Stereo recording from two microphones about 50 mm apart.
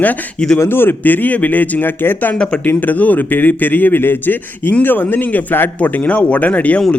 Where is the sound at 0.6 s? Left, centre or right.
Left.